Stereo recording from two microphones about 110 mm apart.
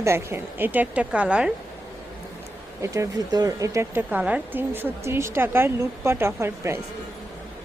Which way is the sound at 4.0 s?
15° right (ahead or behind).